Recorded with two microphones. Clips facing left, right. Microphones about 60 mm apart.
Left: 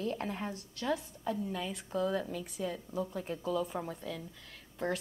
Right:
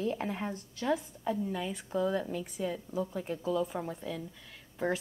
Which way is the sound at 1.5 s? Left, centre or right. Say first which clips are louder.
Right 2 dB; centre.